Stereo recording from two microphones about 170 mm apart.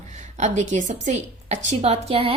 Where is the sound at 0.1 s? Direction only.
40° right (ahead or behind).